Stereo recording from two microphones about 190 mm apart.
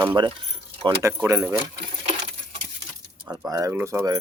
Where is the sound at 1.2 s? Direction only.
10° right (ahead or behind).